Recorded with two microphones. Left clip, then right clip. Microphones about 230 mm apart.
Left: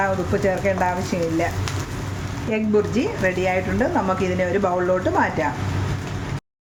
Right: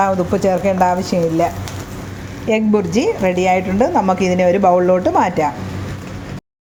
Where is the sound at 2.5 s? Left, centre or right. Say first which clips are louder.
Right 5 dB; right.